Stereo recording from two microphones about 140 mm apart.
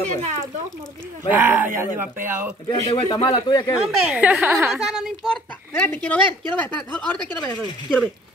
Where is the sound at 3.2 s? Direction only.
35° left (ahead or behind).